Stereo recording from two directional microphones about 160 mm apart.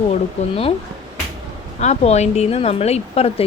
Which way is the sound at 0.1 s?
35° left (ahead or behind).